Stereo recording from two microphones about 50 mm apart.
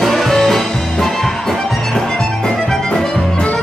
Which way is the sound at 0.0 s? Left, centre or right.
Centre.